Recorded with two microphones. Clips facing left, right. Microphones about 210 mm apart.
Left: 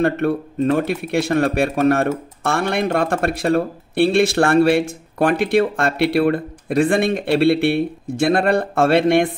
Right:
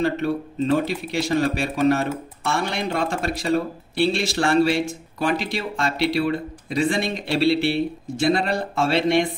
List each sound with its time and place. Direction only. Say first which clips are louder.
0.0 s speech: left 4 dB; 55° left (ahead or behind)